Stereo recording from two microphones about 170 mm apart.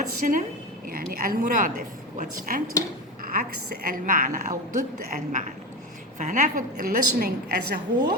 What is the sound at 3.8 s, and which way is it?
A woman's voice, 55° right (ahead or behind).